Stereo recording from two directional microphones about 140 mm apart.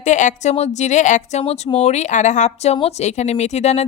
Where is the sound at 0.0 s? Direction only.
60° left (ahead or behind).